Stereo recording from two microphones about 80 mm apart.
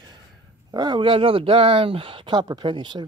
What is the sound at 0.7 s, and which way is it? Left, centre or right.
Speech, right.